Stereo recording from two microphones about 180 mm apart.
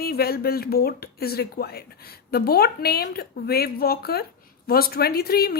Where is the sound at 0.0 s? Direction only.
60° left (ahead or behind).